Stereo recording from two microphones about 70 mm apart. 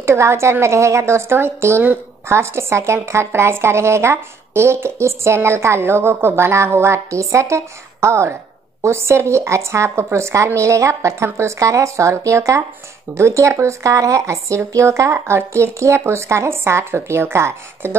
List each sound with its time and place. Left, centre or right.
0.0 s speech: right